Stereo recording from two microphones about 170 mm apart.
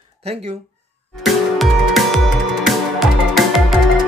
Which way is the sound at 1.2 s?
Centre (ahead or behind).